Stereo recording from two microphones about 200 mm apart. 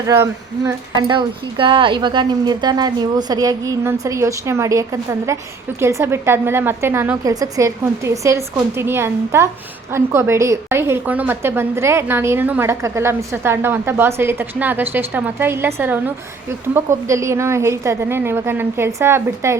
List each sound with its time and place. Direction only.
0.1 s a woman's voice: 15° right (ahead or behind)